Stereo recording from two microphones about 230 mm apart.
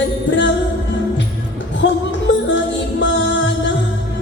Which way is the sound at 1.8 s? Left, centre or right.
Left.